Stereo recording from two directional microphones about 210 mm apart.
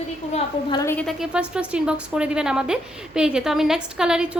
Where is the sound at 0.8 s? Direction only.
5° left (ahead or behind).